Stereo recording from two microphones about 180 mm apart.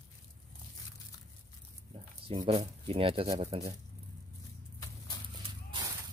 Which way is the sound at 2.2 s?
30° right (ahead or behind).